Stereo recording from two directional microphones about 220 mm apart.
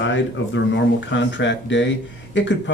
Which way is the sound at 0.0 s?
55° left (ahead or behind).